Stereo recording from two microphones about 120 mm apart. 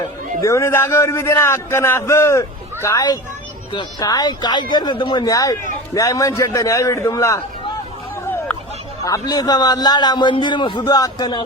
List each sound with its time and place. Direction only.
0.4 s a man's voice: 25° left (ahead or behind)
9.0 s a man's voice: 30° left (ahead or behind)